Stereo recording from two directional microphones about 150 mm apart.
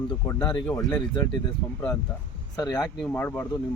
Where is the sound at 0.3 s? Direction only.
25° left (ahead or behind).